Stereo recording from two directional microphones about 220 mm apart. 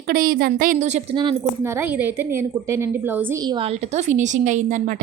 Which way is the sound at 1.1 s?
20° right (ahead or behind).